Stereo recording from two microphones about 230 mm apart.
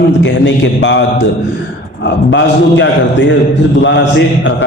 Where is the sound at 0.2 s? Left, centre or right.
Left.